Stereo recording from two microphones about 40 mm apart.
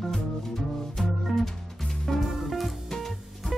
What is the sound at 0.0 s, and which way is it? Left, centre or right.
Music, centre.